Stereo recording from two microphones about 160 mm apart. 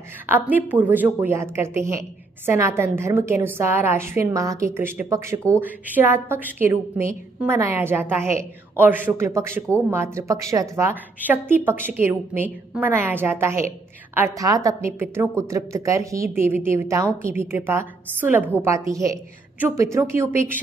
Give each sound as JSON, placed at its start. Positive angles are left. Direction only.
{"t": 0.3, "sound": "a woman's voice", "side_deg": -10}